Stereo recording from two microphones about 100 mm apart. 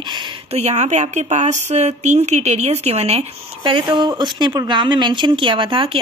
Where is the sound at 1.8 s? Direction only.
90° right.